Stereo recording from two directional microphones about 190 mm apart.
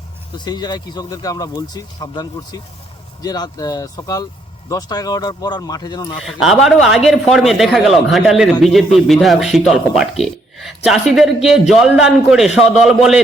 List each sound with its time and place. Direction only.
0.3 s speech: 20° left (ahead or behind)
6.2 s a man's voice: centre (ahead or behind)